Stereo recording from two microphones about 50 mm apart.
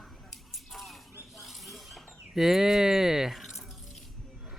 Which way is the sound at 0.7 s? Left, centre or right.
Centre.